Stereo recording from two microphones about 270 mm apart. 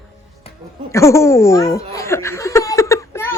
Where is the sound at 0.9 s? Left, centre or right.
Centre.